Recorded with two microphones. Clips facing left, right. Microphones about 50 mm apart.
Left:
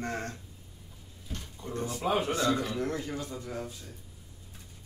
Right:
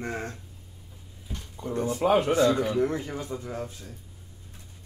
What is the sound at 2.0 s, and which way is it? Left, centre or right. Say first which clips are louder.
Speech: right 7 dB; right.